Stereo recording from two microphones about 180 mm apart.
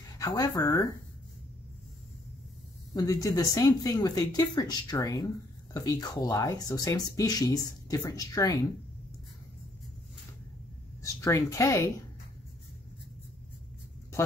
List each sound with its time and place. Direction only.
0.2 s speech: 20° left (ahead or behind)
2.9 s speech: 20° left (ahead or behind)
11.0 s speech: 15° left (ahead or behind)